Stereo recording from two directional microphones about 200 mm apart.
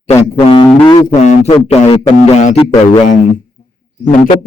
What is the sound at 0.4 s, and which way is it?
Speech, 30° left (ahead or behind).